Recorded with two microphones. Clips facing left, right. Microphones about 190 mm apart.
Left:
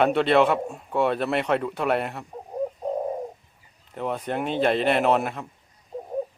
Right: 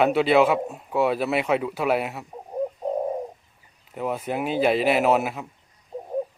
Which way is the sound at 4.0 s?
5° right (ahead or behind).